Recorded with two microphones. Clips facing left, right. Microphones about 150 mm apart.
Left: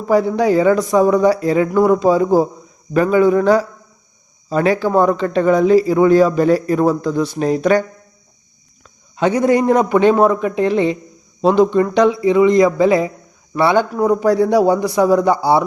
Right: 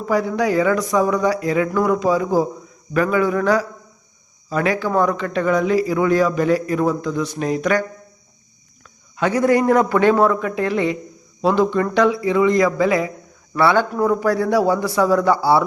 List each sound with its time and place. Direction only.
0.0 s speech: 30° left (ahead or behind)
9.1 s a man's voice: 25° left (ahead or behind)